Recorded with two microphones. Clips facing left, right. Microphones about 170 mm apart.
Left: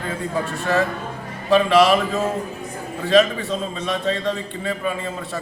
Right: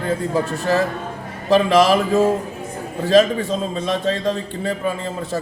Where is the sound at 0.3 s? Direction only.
35° right (ahead or behind).